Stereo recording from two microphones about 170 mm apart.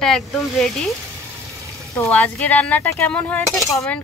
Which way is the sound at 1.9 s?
10° left (ahead or behind).